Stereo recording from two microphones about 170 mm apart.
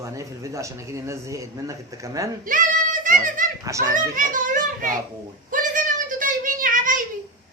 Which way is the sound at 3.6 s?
20° right (ahead or behind).